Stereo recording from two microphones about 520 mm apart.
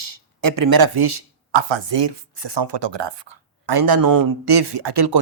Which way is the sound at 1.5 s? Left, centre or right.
Right.